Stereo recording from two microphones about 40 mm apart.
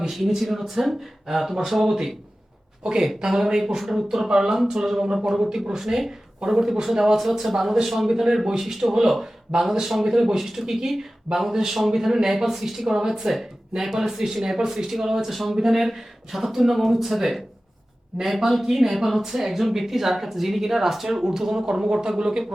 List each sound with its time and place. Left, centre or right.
0.1 s speech: centre
2.8 s speech: centre